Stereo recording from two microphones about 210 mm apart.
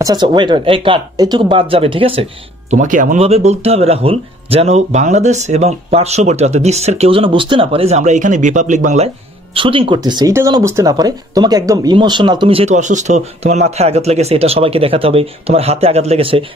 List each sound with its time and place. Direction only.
0.0 s speech: 20° right (ahead or behind)
2.7 s speech: 40° right (ahead or behind)